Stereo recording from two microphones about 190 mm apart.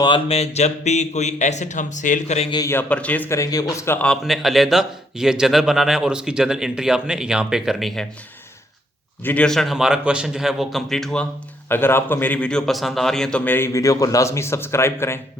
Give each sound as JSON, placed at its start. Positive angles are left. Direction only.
{"t": 0.0, "sound": "speech", "side_deg": 30}
{"t": 2.5, "sound": "a man's voice", "side_deg": 15}
{"t": 9.2, "sound": "a man's voice", "side_deg": 5}